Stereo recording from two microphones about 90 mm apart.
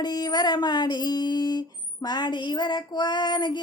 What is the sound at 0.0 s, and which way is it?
Child singing, 50° left (ahead or behind).